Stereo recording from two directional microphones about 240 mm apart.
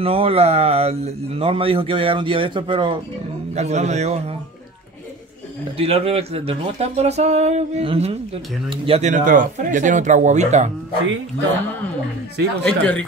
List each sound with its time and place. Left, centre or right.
0.0 s speech: right
5.8 s speech: right
12.6 s speech: centre